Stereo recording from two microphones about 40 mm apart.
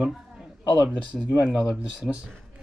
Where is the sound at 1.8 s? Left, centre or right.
Right.